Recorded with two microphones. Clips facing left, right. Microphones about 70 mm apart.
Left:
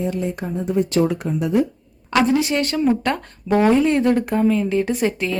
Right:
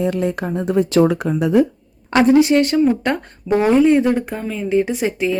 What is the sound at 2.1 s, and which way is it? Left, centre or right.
A woman's voice, right.